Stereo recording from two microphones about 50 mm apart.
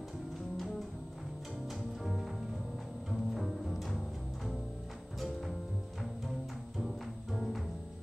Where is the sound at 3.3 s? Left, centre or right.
Centre.